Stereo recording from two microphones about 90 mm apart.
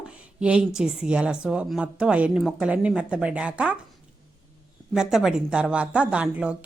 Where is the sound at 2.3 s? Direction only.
Centre (ahead or behind).